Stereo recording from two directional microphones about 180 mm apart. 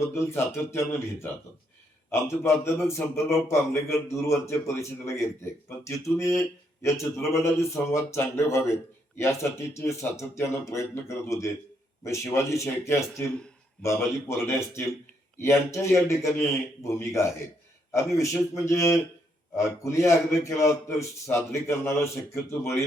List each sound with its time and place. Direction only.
0.1 s a man's voice: 15° left (ahead or behind)
20.1 s a man's voice: 15° left (ahead or behind)